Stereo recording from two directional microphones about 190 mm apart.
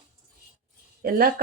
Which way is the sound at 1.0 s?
50° right (ahead or behind).